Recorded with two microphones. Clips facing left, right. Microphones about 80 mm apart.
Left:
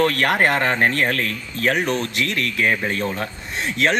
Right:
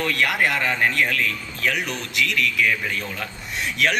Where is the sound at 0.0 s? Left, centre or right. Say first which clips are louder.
Left 4 dB; left.